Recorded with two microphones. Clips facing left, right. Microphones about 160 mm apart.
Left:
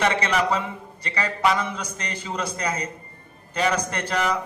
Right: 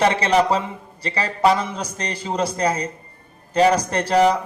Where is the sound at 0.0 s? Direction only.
35° right (ahead or behind).